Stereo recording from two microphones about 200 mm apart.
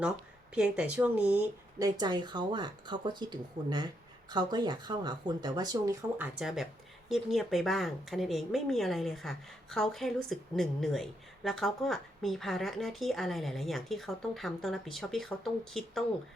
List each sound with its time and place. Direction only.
0.5 s speech: 5° right (ahead or behind)
1.8 s speech: 20° right (ahead or behind)
7.1 s speech: centre (ahead or behind)